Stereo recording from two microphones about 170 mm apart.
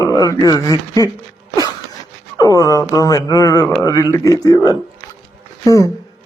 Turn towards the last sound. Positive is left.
turn(degrees=20)  # may be behind; listen again after turning